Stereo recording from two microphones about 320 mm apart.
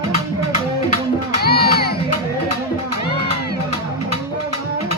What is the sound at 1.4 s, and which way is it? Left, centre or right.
Music, left.